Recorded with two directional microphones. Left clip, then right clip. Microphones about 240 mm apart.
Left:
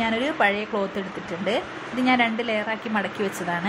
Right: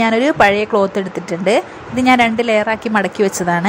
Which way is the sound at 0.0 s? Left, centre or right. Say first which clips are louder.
Right 10 dB; right.